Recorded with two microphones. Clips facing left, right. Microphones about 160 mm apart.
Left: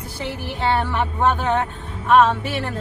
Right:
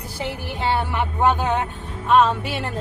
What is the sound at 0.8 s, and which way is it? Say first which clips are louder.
Speech: even; 15° right (ahead or behind).